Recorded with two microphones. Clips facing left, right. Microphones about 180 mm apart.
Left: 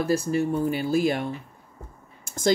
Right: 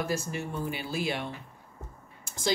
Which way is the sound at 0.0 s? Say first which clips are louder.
Left 9 dB; 35° left (ahead or behind).